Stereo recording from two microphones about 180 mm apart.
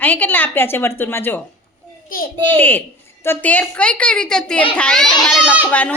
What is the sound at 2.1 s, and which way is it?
Speech, 55° left (ahead or behind).